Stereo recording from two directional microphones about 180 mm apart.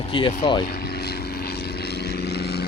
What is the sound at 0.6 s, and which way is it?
Vehicle, 60° left (ahead or behind).